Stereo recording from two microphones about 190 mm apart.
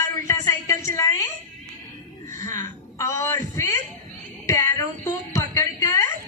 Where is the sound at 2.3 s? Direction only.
15° left (ahead or behind).